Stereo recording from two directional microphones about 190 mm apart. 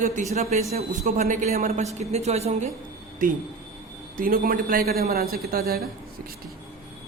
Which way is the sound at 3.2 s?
45° right (ahead or behind).